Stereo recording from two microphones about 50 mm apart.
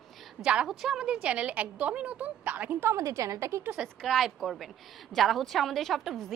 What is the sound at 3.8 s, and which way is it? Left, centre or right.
A woman's voice, centre.